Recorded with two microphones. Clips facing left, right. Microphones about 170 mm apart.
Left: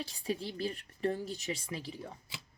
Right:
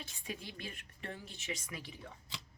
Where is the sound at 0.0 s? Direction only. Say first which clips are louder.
Left 9 dB; 35° left (ahead or behind).